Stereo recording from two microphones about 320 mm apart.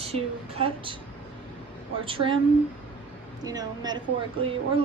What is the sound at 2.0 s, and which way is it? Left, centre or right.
Speech, centre.